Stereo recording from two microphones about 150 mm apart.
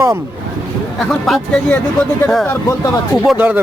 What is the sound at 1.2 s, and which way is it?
Speech, 5° left (ahead or behind).